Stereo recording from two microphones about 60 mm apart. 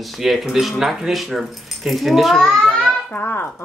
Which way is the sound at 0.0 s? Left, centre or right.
Centre.